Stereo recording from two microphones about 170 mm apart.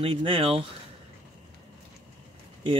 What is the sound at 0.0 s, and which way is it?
Speech, 35° right (ahead or behind).